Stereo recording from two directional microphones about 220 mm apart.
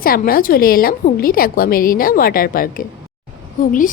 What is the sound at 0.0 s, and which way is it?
A woman's voice, 40° left (ahead or behind).